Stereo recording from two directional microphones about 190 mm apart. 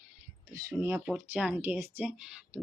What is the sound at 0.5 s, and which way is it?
Speech, 10° right (ahead or behind).